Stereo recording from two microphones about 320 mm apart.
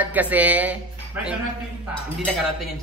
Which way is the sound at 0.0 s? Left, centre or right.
Centre.